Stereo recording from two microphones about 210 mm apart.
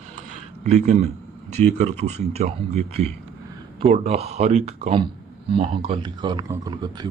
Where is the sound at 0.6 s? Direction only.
30° right (ahead or behind).